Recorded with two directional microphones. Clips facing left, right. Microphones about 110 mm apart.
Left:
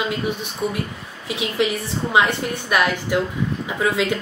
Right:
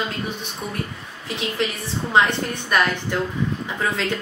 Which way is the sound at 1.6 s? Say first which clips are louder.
Left 6 dB; 10° left (ahead or behind).